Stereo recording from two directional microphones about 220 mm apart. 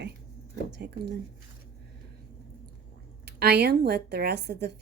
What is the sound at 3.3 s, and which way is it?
Speech, 50° right (ahead or behind).